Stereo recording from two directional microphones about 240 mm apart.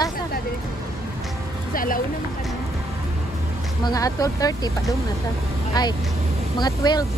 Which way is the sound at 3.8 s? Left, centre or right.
Centre.